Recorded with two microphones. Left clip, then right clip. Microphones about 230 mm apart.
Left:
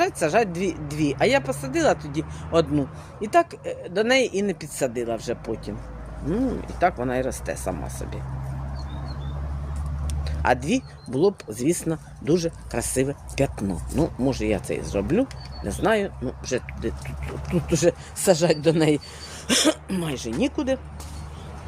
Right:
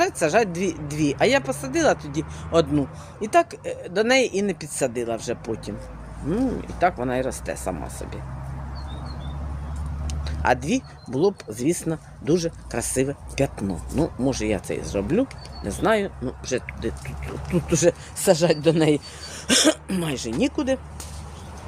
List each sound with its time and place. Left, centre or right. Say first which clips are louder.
0.0 s speech: right 1 dB; centre
10.2 s speech: even; centre